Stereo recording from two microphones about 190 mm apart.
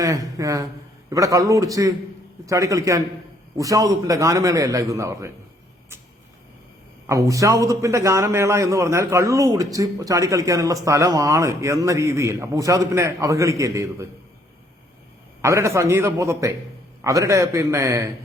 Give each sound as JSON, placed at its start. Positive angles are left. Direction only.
{"t": 0.0, "sound": "speech", "side_deg": -15}
{"t": 7.1, "sound": "speech", "side_deg": -15}
{"t": 15.4, "sound": "speech", "side_deg": -15}